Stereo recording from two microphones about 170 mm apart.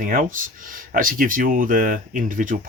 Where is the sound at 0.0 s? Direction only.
50° right (ahead or behind).